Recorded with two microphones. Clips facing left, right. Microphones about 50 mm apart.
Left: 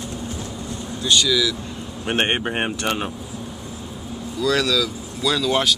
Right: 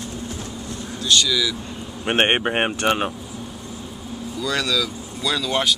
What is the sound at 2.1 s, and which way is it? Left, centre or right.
Speech, right.